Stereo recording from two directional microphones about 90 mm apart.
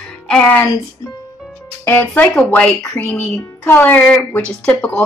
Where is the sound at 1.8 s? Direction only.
20° left (ahead or behind).